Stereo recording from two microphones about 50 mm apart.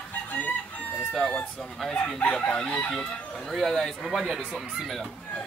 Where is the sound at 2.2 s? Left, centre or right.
Left.